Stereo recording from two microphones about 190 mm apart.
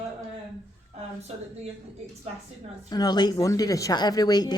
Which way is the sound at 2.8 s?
20° left (ahead or behind).